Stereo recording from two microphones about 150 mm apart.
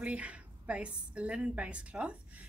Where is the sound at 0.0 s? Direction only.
10° right (ahead or behind).